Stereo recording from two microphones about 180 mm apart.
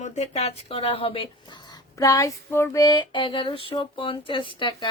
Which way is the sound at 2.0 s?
20° left (ahead or behind).